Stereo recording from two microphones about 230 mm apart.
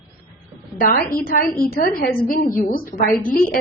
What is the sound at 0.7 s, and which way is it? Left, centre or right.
A woman's voice, left.